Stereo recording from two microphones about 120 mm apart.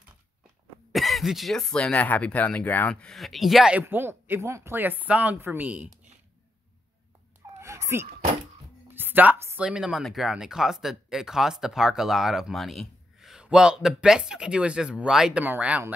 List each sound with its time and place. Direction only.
0.9 s speech: centre (ahead or behind)
3.8 s speech: 20° right (ahead or behind)
7.6 s a sound: 25° right (ahead or behind)
8.8 s music: 15° right (ahead or behind)
9.6 s speech: 10° right (ahead or behind)